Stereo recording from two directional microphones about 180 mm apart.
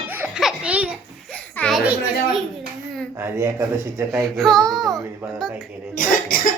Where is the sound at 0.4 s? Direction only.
5° right (ahead or behind).